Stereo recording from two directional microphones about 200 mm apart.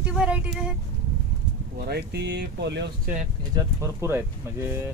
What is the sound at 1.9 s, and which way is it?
Speech, 55° right (ahead or behind).